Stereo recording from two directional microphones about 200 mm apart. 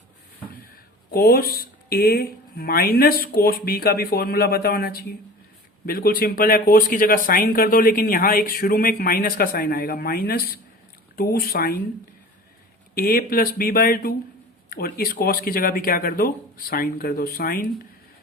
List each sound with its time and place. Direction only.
1.1 s speech: 50° left (ahead or behind)
12.9 s speech: 45° left (ahead or behind)